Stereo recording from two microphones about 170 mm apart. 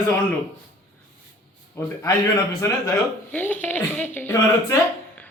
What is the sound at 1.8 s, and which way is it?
A man's voice, 15° left (ahead or behind).